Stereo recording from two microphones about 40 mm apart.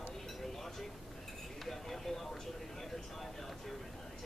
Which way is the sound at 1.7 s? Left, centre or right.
Centre.